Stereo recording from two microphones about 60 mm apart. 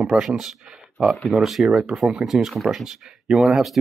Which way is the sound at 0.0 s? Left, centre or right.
Centre.